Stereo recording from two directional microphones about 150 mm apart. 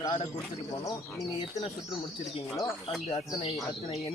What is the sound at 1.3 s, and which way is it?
Speech, 40° left (ahead or behind).